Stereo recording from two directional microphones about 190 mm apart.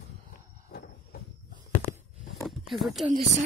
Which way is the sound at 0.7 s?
55° left (ahead or behind).